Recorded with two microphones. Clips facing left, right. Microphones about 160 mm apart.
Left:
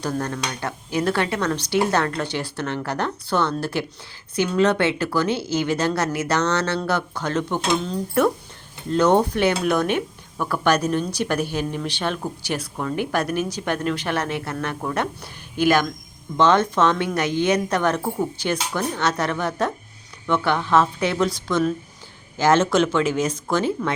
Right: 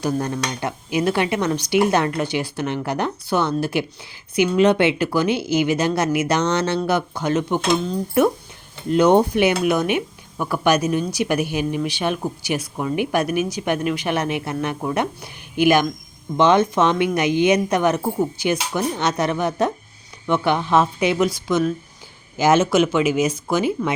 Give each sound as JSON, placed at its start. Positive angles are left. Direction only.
{"t": 0.0, "sound": "speech", "side_deg": -15}